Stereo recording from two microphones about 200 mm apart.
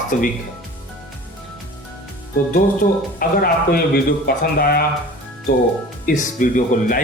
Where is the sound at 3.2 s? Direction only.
45° left (ahead or behind).